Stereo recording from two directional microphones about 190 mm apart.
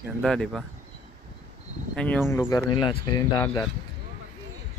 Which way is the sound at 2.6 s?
25° left (ahead or behind).